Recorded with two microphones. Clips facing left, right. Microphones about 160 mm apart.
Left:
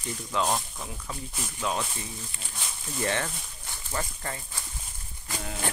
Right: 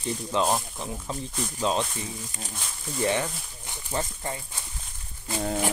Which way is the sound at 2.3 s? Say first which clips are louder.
Right 6 dB; 40° right (ahead or behind).